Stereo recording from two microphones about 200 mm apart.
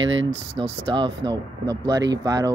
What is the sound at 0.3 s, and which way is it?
Speech, 25° right (ahead or behind).